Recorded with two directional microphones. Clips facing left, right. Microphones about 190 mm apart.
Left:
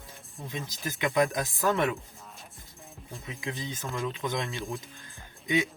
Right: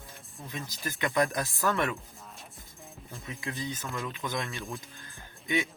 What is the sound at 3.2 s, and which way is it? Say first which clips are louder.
Speech: even; 20° left (ahead or behind).